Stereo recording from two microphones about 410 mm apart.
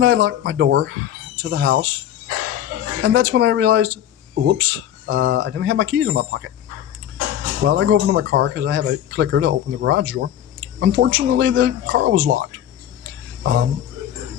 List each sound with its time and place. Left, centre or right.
0.0 s speech: right
3.0 s speech: right
7.6 s speech: right